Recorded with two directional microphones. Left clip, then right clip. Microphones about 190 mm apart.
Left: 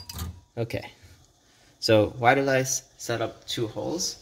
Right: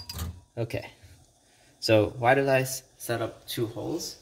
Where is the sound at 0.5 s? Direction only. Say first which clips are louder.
Left 2 dB; 30° left (ahead or behind).